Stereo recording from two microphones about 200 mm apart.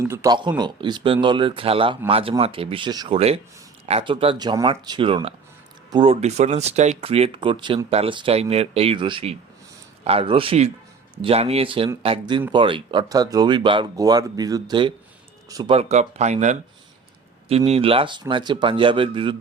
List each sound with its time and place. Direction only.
0.0 s speech: 15° right (ahead or behind)
15.7 s speech: 35° right (ahead or behind)
17.7 s speech: 30° right (ahead or behind)